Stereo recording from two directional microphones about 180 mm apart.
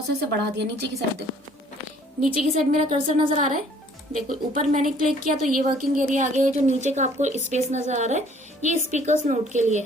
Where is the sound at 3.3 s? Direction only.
45° right (ahead or behind).